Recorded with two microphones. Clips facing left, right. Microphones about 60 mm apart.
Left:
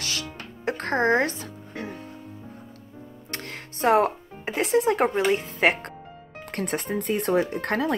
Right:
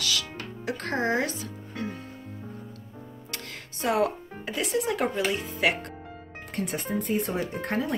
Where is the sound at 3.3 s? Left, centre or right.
Left.